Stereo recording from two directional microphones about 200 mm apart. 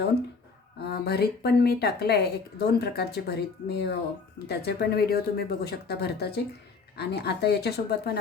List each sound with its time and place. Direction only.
0.8 s speech: 55° left (ahead or behind)